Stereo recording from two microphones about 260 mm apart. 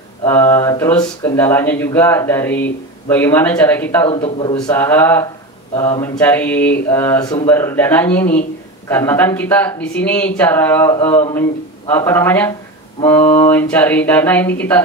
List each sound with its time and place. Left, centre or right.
0.2 s speech: centre
4.1 s a man's voice: centre
4.6 s speech: centre